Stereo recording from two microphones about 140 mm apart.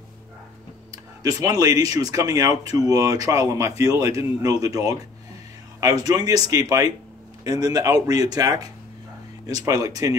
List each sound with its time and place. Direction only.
0.9 s speech: 25° right (ahead or behind)